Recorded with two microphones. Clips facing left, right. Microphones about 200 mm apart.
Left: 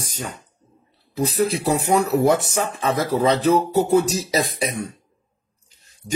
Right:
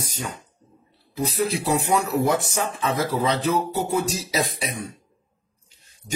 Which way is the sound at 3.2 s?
45° left (ahead or behind).